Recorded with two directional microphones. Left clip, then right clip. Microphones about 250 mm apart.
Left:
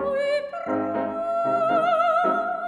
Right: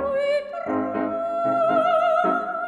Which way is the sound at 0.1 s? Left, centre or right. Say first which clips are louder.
Right 1 dB; centre.